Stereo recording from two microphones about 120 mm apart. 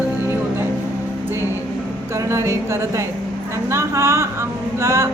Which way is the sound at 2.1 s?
25° right (ahead or behind).